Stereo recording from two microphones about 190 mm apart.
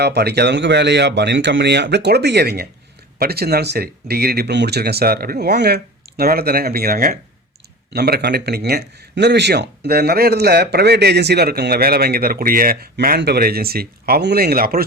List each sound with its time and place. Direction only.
0.0 s speech: 60° right (ahead or behind)